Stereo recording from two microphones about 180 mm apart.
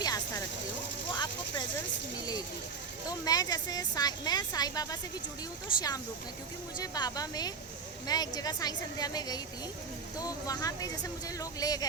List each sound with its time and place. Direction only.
0.0 s a sound: 20° left (ahead or behind)
1.1 s vehicle: 25° left (ahead or behind)
3.1 s speech: 20° left (ahead or behind)
6.7 s speech: 20° left (ahead or behind)